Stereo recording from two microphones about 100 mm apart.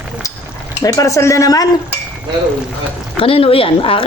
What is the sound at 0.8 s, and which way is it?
Speech, 35° left (ahead or behind).